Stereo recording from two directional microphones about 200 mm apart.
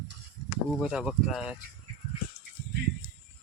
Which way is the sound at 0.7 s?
Centre (ahead or behind).